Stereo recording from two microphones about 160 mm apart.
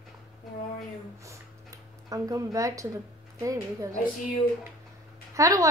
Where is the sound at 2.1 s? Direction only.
20° right (ahead or behind).